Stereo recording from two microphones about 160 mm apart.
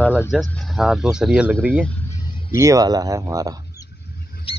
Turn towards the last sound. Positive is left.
turn(degrees=35)  # may be behind; listen again after turning